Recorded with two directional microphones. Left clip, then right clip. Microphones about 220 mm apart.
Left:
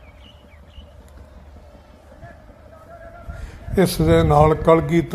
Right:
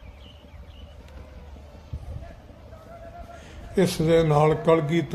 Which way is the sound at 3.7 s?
15° left (ahead or behind).